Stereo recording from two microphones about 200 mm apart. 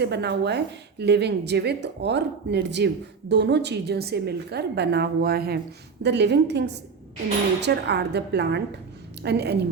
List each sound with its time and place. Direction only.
0.0 s a woman's voice: 55° right (ahead or behind)